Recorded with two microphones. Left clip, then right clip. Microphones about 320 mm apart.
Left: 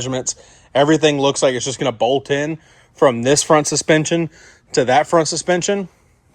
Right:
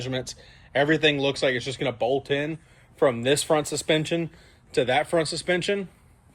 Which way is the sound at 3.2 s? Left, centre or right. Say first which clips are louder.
Left 8 dB; left.